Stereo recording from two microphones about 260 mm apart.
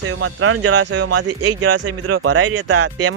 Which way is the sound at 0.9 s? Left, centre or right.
Right.